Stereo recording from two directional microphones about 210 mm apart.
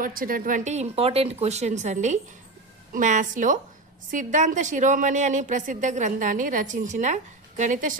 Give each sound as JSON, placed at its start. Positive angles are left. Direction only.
{"t": 0.0, "sound": "a woman's voice", "side_deg": -40}